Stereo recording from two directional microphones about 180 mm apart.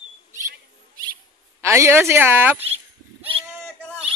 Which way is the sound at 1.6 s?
15° right (ahead or behind).